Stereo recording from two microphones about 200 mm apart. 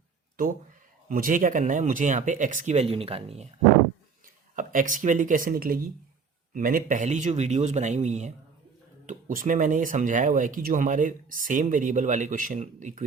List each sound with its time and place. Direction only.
1.0 s speech: 45° right (ahead or behind)
4.5 s speech: 40° right (ahead or behind)